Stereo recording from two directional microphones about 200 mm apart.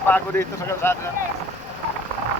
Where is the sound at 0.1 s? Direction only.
10° left (ahead or behind).